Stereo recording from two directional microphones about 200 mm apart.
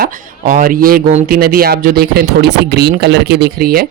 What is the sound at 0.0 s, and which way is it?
Speech, 45° right (ahead or behind).